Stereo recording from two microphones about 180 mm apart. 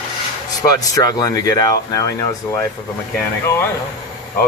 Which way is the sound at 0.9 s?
20° left (ahead or behind).